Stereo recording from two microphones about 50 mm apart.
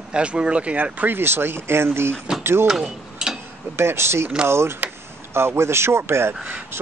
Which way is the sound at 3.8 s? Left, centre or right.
Right.